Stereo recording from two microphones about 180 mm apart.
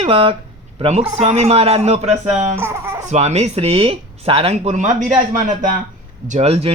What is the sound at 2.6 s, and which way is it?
Speech, 15° right (ahead or behind).